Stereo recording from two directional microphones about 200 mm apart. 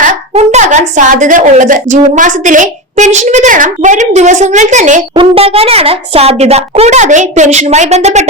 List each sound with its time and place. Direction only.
0.1 s a woman's voice: 35° right (ahead or behind)
5.1 s a woman's voice: 25° right (ahead or behind)